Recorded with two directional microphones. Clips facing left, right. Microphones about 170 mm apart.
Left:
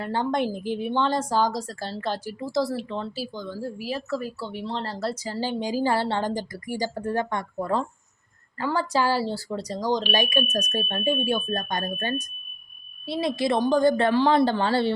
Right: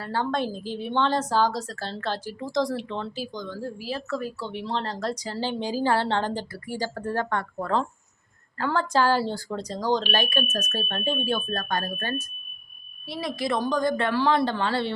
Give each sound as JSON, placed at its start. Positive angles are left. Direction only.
{"t": 0.0, "sound": "a woman's voice", "side_deg": 20}